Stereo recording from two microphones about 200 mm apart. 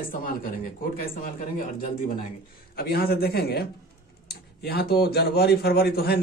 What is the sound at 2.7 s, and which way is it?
Speech, 50° left (ahead or behind).